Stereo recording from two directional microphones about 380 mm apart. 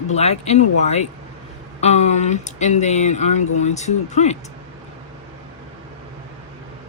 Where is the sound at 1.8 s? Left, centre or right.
Centre.